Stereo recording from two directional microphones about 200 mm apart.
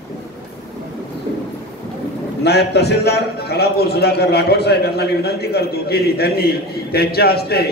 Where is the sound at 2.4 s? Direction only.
55° left (ahead or behind).